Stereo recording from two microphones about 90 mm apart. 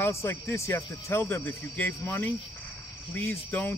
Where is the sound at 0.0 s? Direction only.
30° left (ahead or behind).